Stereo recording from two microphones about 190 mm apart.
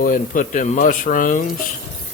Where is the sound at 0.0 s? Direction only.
45° left (ahead or behind).